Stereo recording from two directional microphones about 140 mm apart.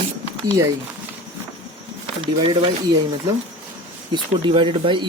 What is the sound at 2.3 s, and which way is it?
Speech, 35° right (ahead or behind).